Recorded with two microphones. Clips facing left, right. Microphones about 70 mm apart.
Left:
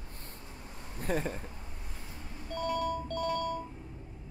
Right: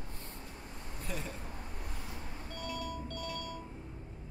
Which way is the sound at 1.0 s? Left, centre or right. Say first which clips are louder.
Left 9 dB; left.